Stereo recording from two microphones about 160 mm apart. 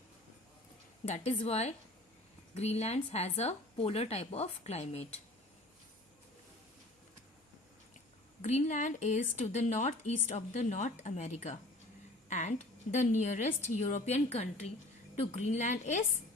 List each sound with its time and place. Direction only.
1.0 s a woman's voice: 45° left (ahead or behind)
8.4 s a woman's voice: 45° left (ahead or behind)